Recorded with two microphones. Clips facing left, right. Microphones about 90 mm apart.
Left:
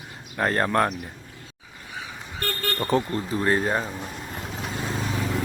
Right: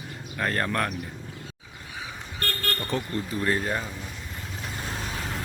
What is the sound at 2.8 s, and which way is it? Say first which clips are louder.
Speech: left 8 dB; 35° left (ahead or behind).